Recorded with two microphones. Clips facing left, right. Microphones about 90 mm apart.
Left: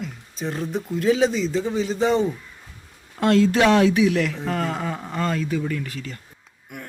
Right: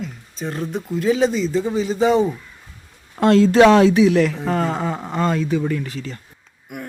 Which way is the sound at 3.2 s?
30° right (ahead or behind).